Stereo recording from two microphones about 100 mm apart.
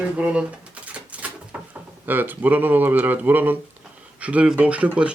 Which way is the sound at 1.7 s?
20° right (ahead or behind).